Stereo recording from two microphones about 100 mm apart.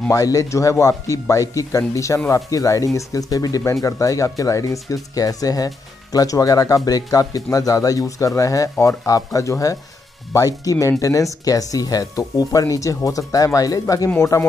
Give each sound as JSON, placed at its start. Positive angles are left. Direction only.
{"t": 0.1, "sound": "speech", "side_deg": 35}